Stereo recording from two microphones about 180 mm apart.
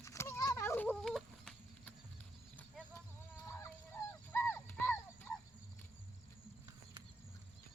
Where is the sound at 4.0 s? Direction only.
20° left (ahead or behind).